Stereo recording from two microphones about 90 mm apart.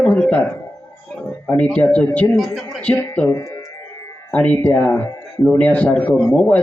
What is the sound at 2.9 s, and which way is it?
Speech, 25° left (ahead or behind).